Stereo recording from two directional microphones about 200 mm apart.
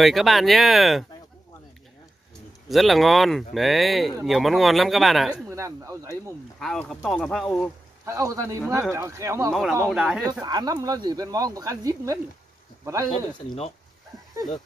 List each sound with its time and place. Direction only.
0.0 s speech: centre (ahead or behind)
2.7 s speech: centre (ahead or behind)
5.5 s speech: 15° right (ahead or behind)
6.6 s speech: centre (ahead or behind)
8.0 s speech: 15° right (ahead or behind)
9.5 s speech: centre (ahead or behind)
10.4 s speech: 20° right (ahead or behind)